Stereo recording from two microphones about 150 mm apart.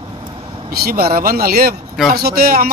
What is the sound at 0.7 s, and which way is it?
Speech, 90° right.